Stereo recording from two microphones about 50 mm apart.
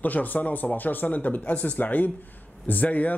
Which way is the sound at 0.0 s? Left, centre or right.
Left.